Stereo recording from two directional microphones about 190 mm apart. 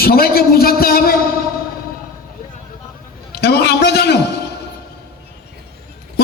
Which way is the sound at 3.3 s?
60° left (ahead or behind).